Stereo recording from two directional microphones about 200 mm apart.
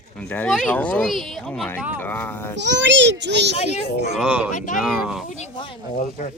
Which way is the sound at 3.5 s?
30° left (ahead or behind).